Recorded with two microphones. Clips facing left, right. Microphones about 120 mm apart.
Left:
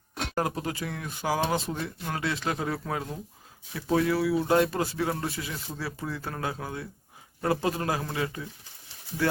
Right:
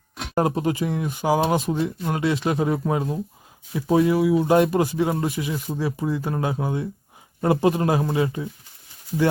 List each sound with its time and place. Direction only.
0.3 s speech: 20° right (ahead or behind)